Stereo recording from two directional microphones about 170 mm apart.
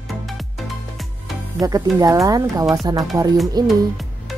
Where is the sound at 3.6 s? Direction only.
Centre (ahead or behind).